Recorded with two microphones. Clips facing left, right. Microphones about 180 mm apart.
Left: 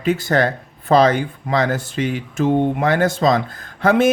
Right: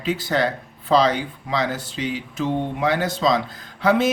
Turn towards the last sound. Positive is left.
turn(degrees=50)  # may be behind; listen again after turning